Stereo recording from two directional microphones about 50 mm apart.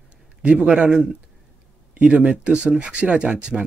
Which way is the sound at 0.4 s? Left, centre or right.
Right.